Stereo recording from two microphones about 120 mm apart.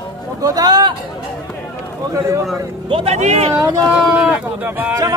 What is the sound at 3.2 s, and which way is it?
Speech, 75° right (ahead or behind).